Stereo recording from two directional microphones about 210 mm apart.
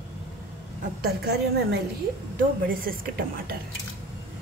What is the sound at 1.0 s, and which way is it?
A woman's voice, 50° right (ahead or behind).